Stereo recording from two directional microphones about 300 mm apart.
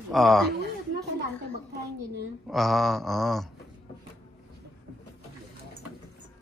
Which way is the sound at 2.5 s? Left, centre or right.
Centre.